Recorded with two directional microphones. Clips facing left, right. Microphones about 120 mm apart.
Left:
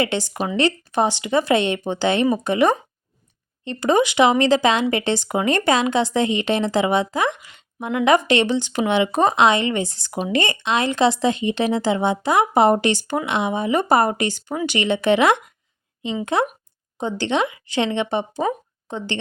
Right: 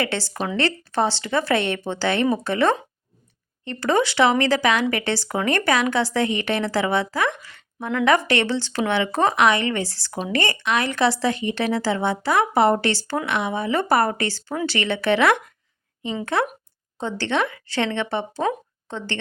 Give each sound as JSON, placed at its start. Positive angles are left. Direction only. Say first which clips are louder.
{"t": 0.0, "sound": "speech", "louder": "left 3 dB", "side_deg": 15}